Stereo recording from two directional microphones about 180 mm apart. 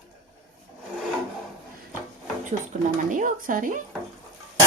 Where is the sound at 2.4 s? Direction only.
45° right (ahead or behind).